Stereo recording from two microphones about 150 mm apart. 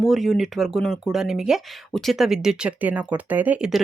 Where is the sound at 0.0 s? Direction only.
Centre (ahead or behind).